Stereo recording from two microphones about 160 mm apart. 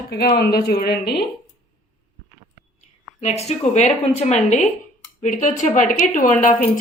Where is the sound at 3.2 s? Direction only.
45° left (ahead or behind).